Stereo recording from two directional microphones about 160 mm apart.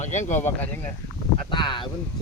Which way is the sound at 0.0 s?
50° left (ahead or behind).